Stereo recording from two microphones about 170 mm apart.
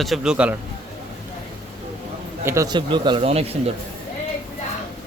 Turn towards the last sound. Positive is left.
turn(degrees=-35)  # may be behind; listen again after turning